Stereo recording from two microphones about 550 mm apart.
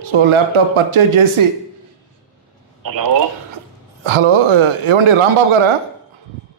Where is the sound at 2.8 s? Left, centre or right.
Right.